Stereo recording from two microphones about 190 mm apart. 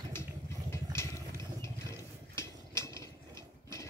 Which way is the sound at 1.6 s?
15° left (ahead or behind).